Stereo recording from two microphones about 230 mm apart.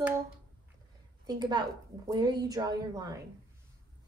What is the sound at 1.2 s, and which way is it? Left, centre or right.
A woman's voice, centre.